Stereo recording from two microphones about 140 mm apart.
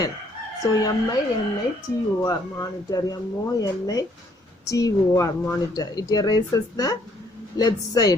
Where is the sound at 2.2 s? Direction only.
25° left (ahead or behind).